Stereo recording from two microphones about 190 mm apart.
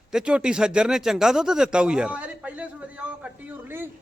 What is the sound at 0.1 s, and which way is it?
Speech, 5° right (ahead or behind).